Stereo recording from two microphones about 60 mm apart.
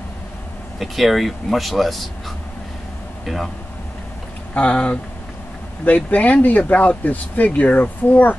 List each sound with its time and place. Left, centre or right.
0.7 s speech: centre
4.6 s speech: centre